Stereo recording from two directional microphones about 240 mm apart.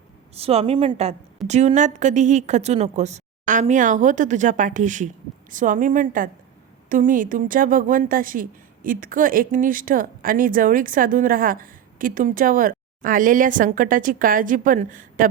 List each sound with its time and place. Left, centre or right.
0.3 s a woman's voice: right